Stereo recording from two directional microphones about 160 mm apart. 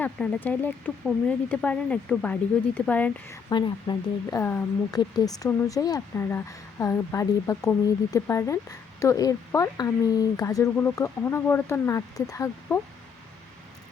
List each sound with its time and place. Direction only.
0.0 s speech: 10° left (ahead or behind)
3.5 s speech: 25° left (ahead or behind)
4.4 s speech: 15° left (ahead or behind)
4.9 s speech: 25° left (ahead or behind)